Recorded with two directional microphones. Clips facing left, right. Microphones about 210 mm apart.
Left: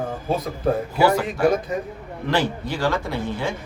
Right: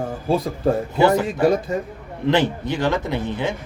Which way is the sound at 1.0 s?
20° right (ahead or behind).